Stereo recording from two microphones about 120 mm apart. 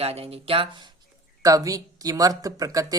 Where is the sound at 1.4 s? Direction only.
30° right (ahead or behind).